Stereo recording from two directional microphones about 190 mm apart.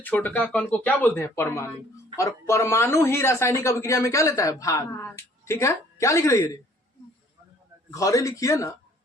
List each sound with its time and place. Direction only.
0.0 s speech: 10° left (ahead or behind)
7.9 s speech: 15° left (ahead or behind)